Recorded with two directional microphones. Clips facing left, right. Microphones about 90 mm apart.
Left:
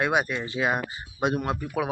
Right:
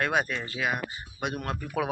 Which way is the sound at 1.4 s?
10° left (ahead or behind).